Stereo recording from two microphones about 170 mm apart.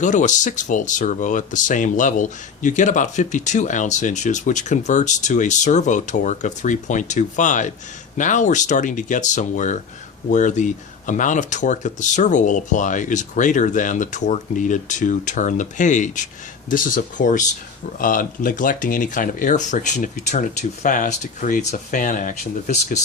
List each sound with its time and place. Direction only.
0.0 s speech: 45° left (ahead or behind)